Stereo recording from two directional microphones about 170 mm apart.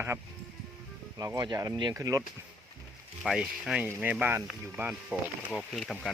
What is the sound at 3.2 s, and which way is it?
Speech, centre (ahead or behind).